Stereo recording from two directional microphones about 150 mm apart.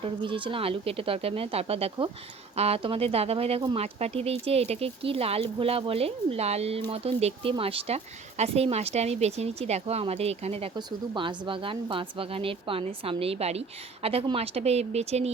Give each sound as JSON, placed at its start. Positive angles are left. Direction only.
{"t": 0.0, "sound": "speech", "side_deg": -35}
{"t": 10.8, "sound": "speech", "side_deg": -30}